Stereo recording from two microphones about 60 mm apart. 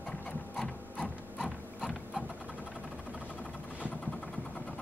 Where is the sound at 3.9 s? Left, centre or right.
Centre.